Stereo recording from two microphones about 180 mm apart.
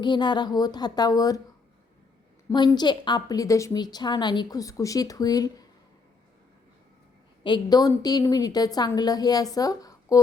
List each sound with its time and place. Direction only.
0.0 s a woman's voice: 25° left (ahead or behind)
2.5 s a woman's voice: 25° left (ahead or behind)
7.4 s a woman's voice: 25° left (ahead or behind)